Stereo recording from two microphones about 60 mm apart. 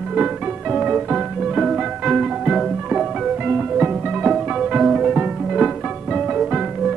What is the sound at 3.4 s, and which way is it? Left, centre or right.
Music, right.